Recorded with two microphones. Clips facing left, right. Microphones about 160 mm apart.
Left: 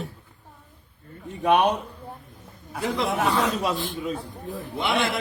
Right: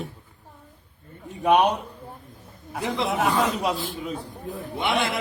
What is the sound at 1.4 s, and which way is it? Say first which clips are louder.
Speech: right 1 dB; 15° right (ahead or behind).